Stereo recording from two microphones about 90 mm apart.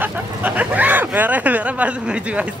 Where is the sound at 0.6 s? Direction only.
20° right (ahead or behind).